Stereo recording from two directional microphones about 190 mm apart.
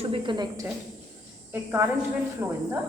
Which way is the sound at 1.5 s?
10° right (ahead or behind).